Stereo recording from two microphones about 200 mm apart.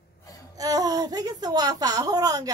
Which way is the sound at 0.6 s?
15° right (ahead or behind).